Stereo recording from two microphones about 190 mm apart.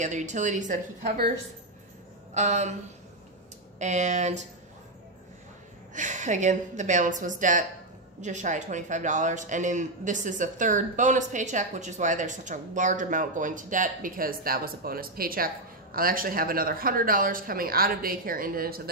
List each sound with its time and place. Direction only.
0.0 s a woman's voice: 40° right (ahead or behind)
2.3 s a woman's voice: 35° right (ahead or behind)
3.8 s a woman's voice: 40° right (ahead or behind)
5.9 s a woman's voice: 40° right (ahead or behind)